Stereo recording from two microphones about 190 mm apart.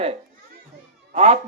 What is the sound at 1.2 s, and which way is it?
Speech, 35° right (ahead or behind).